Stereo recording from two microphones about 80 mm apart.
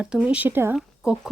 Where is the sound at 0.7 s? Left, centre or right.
Centre.